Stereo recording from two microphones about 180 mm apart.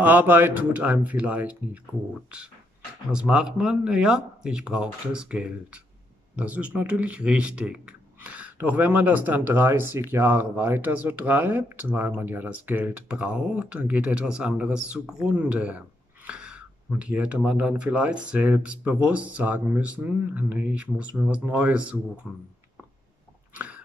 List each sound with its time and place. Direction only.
0.0 s speech: 10° right (ahead or behind)
3.1 s speech: 5° right (ahead or behind)
23.5 s biting: 10° right (ahead or behind)